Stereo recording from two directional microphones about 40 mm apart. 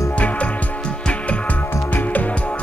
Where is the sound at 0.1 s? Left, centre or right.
Left.